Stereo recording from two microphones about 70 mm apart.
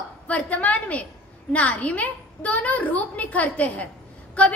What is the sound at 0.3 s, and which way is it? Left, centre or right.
A woman's voice, left.